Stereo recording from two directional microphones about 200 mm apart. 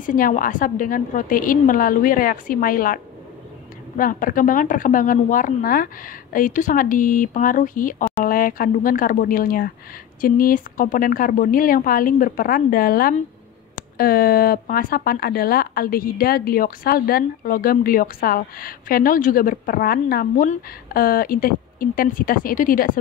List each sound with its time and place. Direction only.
0.0 s speech: 40° left (ahead or behind)